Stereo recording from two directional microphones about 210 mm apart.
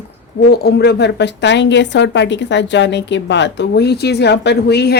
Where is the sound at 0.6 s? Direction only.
50° left (ahead or behind).